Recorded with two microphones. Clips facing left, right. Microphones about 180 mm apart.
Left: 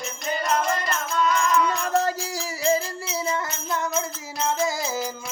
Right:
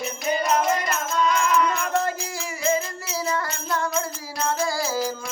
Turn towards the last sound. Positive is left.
turn(degrees=20)  # may be behind; listen again after turning